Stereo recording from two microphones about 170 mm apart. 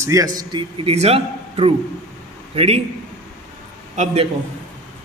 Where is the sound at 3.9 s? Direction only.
40° right (ahead or behind).